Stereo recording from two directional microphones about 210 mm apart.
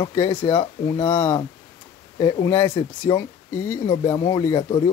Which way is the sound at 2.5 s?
10° left (ahead or behind).